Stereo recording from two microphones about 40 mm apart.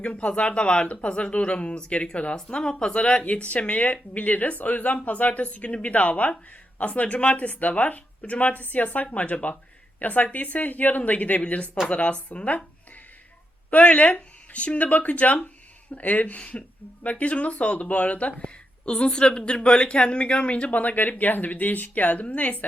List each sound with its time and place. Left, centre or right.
0.0 s a woman's voice: left
13.7 s a woman's voice: left
20.7 s a woman's voice: left